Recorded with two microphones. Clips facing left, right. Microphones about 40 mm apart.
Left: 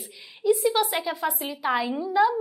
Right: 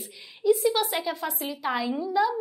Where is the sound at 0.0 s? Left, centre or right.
Centre.